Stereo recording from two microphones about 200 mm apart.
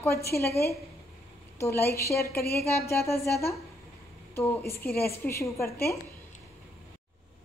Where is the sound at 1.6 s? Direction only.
15° left (ahead or behind).